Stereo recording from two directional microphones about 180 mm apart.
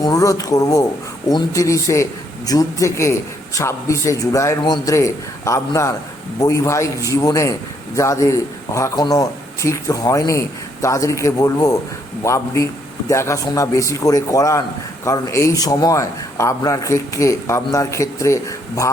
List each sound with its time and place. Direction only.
0.0 s a man's voice: 20° left (ahead or behind)